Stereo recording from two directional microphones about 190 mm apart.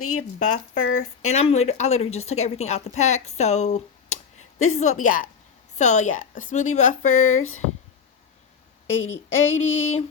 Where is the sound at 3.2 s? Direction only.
35° left (ahead or behind).